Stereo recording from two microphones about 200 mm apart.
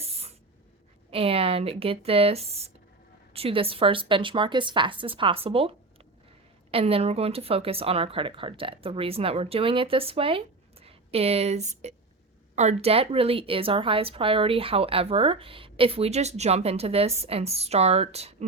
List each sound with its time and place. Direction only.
0.0 s spray: 30° right (ahead or behind)
1.1 s a woman's voice: 30° right (ahead or behind)